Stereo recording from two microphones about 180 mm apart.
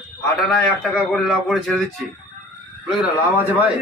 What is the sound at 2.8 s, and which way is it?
Speech, 5° right (ahead or behind).